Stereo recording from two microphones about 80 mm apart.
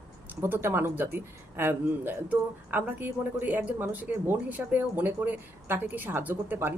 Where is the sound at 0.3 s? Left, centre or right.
Right.